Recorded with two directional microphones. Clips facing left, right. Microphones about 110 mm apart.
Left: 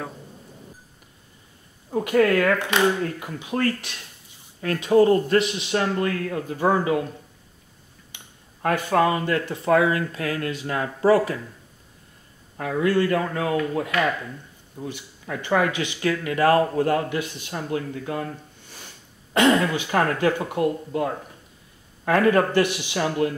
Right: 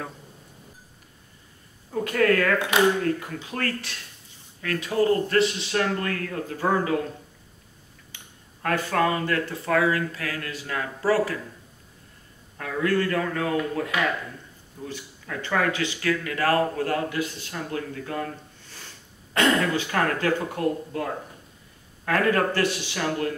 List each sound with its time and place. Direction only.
1.9 s speech: 20° left (ahead or behind)
8.1 s a sound: 15° left (ahead or behind)
8.6 s speech: 20° left (ahead or behind)
12.5 s speech: 20° left (ahead or behind)
19.3 s speech: 20° left (ahead or behind)